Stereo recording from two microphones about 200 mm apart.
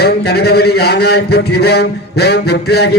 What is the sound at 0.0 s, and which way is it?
A man's voice, 55° left (ahead or behind).